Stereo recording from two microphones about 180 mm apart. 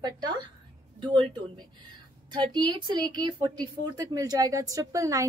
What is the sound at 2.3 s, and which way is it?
Speech, 25° right (ahead or behind).